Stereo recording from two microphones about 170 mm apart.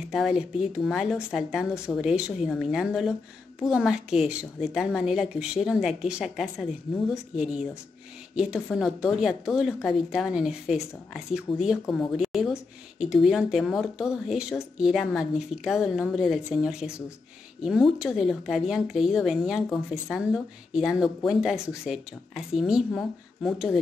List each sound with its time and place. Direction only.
0.1 s speech: 5° right (ahead or behind)
8.4 s speech: 5° right (ahead or behind)